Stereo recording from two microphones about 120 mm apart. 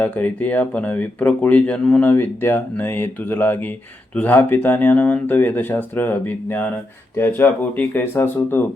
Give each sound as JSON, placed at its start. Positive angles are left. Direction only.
{"t": 0.0, "sound": "speech", "side_deg": 15}